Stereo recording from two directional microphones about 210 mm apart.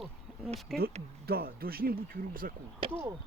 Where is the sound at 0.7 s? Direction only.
Centre (ahead or behind).